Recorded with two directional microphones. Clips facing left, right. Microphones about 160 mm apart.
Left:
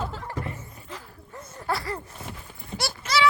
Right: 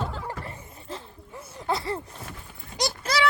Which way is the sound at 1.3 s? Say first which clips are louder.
Right 1 dB; 10° right (ahead or behind).